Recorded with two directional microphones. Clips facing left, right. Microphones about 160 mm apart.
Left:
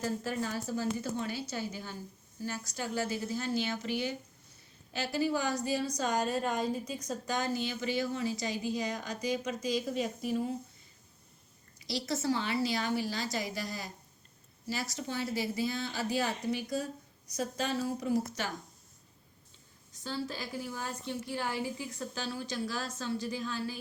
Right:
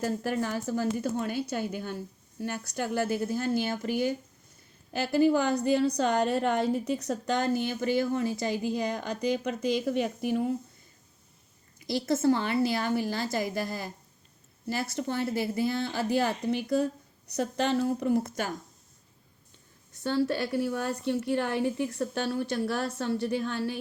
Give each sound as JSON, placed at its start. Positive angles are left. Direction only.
{"t": 0.0, "sound": "a woman's voice", "side_deg": -50}
{"t": 11.9, "sound": "a woman's voice", "side_deg": -50}
{"t": 19.9, "sound": "a woman's voice", "side_deg": -65}